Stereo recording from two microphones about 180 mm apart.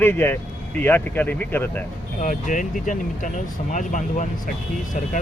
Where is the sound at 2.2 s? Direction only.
45° left (ahead or behind).